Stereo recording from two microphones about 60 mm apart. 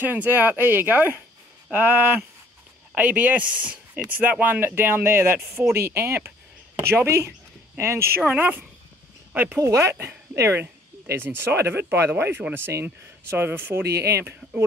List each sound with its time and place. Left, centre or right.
0.0 s speech: right
8.3 s speech: right
9.6 s speech: right
11.1 s speech: right